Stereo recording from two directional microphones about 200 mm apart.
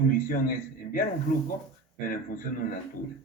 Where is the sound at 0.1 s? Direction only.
45° left (ahead or behind).